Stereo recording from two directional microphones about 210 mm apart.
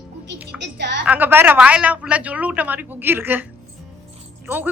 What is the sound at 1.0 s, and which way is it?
A woman's voice, 10° right (ahead or behind).